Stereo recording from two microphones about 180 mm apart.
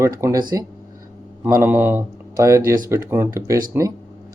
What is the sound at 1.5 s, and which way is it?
A man's voice, 15° right (ahead or behind).